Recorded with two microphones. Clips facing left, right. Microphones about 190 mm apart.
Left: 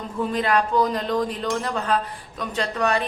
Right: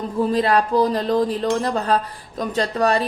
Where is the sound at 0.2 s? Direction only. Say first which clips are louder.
Right 4 dB; 35° right (ahead or behind).